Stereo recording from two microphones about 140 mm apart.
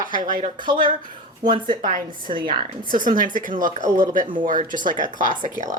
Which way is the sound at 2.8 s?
75° right (ahead or behind).